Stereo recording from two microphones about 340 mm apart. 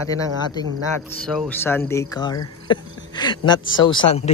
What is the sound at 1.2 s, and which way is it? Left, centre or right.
Speech, centre.